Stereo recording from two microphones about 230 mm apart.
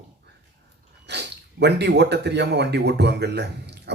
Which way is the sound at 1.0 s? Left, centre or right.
Right.